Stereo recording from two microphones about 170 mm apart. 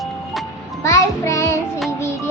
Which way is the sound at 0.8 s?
15° left (ahead or behind).